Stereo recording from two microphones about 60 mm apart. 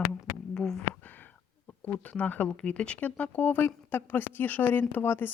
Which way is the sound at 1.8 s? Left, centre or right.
Left.